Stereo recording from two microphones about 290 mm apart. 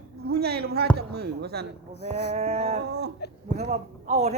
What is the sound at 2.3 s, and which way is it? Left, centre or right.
Speech, right.